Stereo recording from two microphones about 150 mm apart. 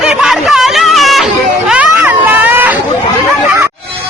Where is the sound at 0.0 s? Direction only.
5° right (ahead or behind).